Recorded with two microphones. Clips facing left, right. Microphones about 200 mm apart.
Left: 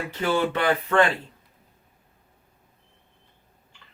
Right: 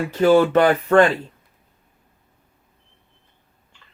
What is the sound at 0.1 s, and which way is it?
Speech, 45° right (ahead or behind).